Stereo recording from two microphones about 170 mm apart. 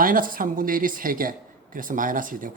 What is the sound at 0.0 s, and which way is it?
Speech, 55° right (ahead or behind).